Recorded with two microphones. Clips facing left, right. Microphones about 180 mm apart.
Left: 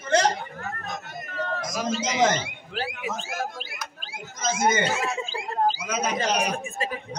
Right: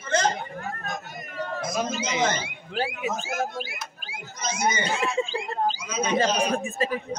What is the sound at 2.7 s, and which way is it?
Speech, 25° right (ahead or behind).